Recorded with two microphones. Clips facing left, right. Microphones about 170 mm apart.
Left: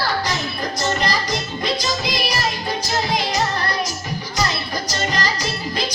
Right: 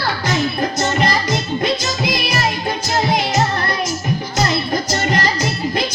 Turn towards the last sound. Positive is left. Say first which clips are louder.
# right 5 dB
turn(degrees=-55)  # may be behind; listen again after turning